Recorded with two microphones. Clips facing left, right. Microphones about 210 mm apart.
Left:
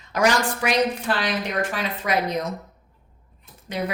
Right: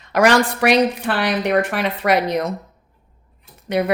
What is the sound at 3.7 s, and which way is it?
Speech, 65° right (ahead or behind).